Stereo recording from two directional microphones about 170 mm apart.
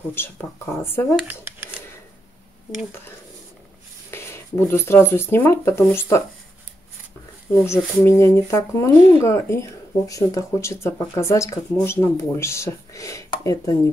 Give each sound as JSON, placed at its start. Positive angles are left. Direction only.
{"t": 0.1, "sound": "speech", "side_deg": 15}
{"t": 4.1, "sound": "speech", "side_deg": 15}
{"t": 7.6, "sound": "speech", "side_deg": 15}